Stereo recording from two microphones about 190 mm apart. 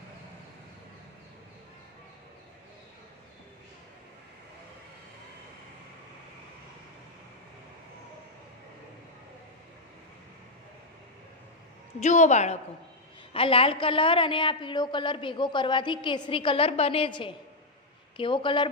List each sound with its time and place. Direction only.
12.0 s a woman's voice: 40° left (ahead or behind)